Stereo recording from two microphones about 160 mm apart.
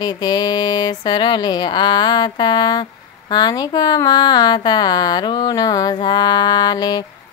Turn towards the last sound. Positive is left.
turn(degrees=25)  # may be behind; listen again after turning